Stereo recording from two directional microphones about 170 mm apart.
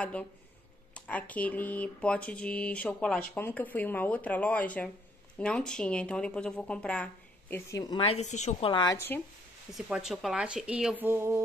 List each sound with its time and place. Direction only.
0.0 s speech: 5° left (ahead or behind)
7.8 s speech: 30° left (ahead or behind)
8.9 s speech: 15° left (ahead or behind)
9.8 s speech: 5° right (ahead or behind)